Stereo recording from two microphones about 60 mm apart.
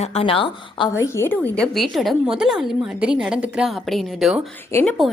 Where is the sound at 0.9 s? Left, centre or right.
Left.